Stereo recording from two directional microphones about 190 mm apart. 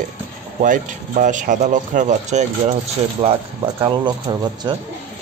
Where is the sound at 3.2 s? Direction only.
25° right (ahead or behind).